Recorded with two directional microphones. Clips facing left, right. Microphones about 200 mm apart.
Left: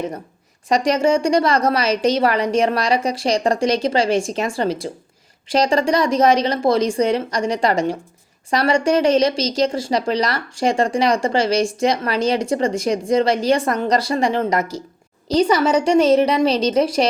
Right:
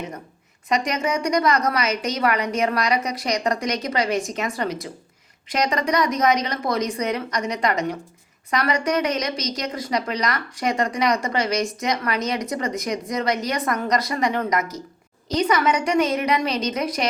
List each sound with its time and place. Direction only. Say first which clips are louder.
0.7 s a woman's voice: left 7 dB; 30° left (ahead or behind)